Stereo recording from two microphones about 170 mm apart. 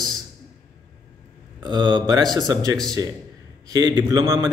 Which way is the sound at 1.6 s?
25° right (ahead or behind).